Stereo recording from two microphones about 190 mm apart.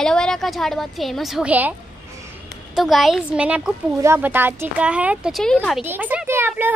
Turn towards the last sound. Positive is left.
turn(degrees=-10)  # may be behind; listen again after turning